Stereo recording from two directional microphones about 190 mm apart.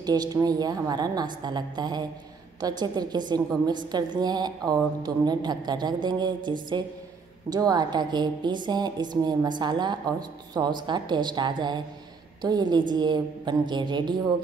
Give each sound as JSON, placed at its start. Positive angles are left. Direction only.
{"t": 0.0, "sound": "a woman's voice", "side_deg": -20}